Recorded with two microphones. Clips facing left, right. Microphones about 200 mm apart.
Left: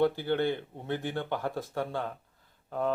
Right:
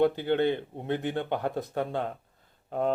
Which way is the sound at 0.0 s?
20° right (ahead or behind).